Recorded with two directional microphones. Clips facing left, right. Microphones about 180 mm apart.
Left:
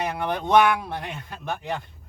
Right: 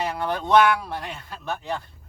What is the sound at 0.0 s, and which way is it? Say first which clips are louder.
Speech: even; 20° left (ahead or behind).